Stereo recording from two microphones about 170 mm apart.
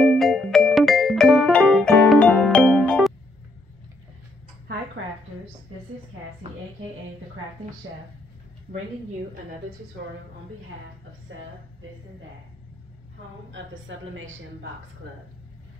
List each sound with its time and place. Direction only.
0.0 s music: centre (ahead or behind)